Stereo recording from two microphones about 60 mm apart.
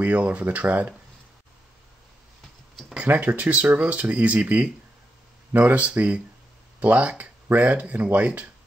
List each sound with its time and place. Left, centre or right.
0.0 s speech: right
3.0 s speech: right